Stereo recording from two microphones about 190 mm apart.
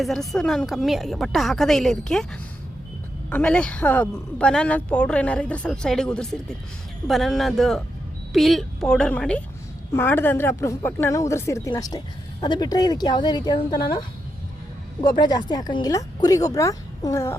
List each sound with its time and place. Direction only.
0.0 s speech: centre (ahead or behind)
3.2 s a woman's voice: 5° left (ahead or behind); by 13.7 s 20° left (ahead or behind)
15.0 s speech: 25° left (ahead or behind)